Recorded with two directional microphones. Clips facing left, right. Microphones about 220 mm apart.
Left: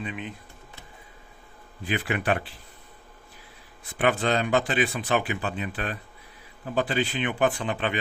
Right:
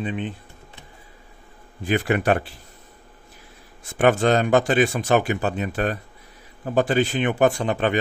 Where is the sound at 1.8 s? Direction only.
45° right (ahead or behind).